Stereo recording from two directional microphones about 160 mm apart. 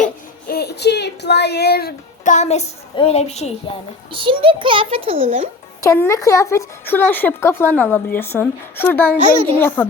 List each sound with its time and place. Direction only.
0.4 s speech: 80° left
2.2 s a child's voice: 45° left (ahead or behind)
4.1 s a child's voice: 35° right (ahead or behind)
5.8 s speech: 15° left (ahead or behind)
9.1 s a child's voice: 45° right (ahead or behind)
9.6 s speech: 10° left (ahead or behind)